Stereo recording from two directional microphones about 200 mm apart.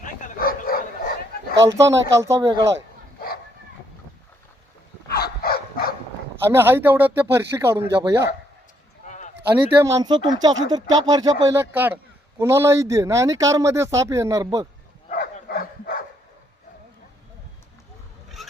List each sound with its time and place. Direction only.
0.0 s bow-wow: 45° left (ahead or behind)
1.6 s speech: 15° right (ahead or behind)
5.0 s dog: 50° left (ahead or behind)
6.4 s speech: 10° right (ahead or behind)
9.0 s a sound: 35° left (ahead or behind)
9.5 s speech: 15° right (ahead or behind)
15.1 s dog: 45° left (ahead or behind)
18.4 s a sound: centre (ahead or behind)